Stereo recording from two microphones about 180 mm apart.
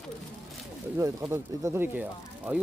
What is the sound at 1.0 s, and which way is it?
Speech, 15° right (ahead or behind).